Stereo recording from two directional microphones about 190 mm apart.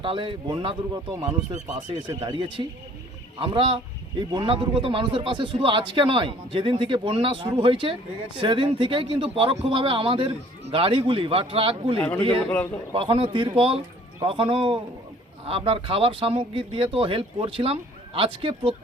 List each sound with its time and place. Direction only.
0.0 s speech: 25° right (ahead or behind)
11.9 s speech: 10° left (ahead or behind)
12.9 s speech: 25° right (ahead or behind)